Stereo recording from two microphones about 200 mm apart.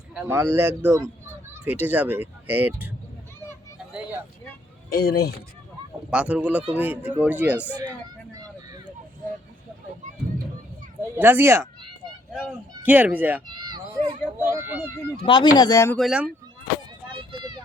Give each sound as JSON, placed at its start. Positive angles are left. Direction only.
{"t": 0.3, "sound": "speech", "side_deg": -10}
{"t": 4.9, "sound": "speech", "side_deg": 50}
{"t": 6.1, "sound": "speech", "side_deg": -5}
{"t": 11.1, "sound": "speech", "side_deg": -10}
{"t": 12.8, "sound": "speech", "side_deg": -10}
{"t": 13.7, "sound": "a child's voice", "side_deg": -20}
{"t": 15.2, "sound": "speech", "side_deg": 25}
{"t": 16.0, "sound": "speech", "side_deg": -5}